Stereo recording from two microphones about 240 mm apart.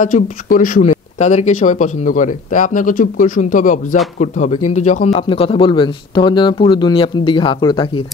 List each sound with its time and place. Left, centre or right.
0.0 s speech: left